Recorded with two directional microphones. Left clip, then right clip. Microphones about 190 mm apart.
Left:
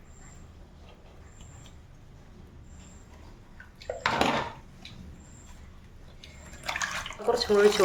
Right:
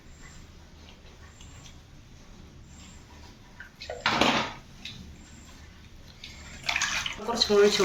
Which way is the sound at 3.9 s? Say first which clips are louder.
Left 3 dB; 45° left (ahead or behind).